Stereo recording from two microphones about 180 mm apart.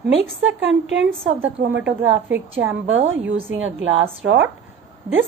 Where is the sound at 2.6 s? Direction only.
90° right.